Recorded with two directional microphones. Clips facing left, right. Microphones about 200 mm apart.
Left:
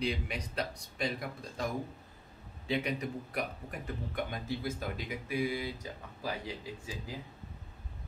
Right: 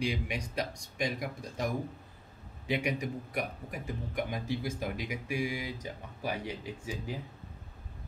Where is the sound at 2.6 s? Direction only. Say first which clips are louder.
Right 1 dB; 15° right (ahead or behind).